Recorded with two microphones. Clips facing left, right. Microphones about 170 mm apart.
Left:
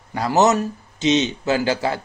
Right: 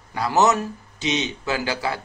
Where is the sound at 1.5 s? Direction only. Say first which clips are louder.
Left 5 dB; 40° left (ahead or behind).